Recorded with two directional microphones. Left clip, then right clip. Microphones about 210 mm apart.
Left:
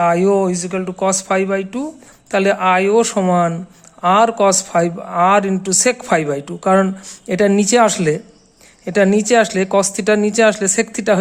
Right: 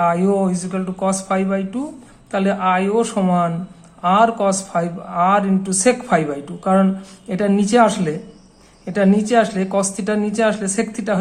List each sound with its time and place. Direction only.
0.0 s speech: 35° left (ahead or behind)